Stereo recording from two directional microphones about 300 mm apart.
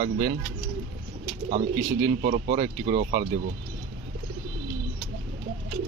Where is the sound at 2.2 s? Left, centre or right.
Right.